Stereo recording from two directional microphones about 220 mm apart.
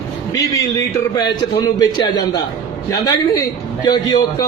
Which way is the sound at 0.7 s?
20° left (ahead or behind).